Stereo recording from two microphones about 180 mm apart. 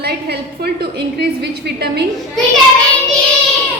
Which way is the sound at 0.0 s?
65° right (ahead or behind).